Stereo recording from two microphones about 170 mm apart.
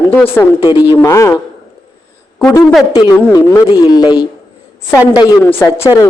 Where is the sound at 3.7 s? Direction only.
25° left (ahead or behind).